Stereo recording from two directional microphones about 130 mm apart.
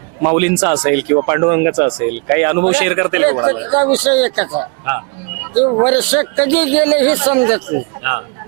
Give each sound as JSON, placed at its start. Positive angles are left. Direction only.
{"t": 0.2, "sound": "a man's voice", "side_deg": -20}